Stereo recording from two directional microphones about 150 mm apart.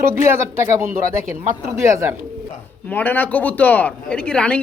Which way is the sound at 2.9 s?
10° left (ahead or behind).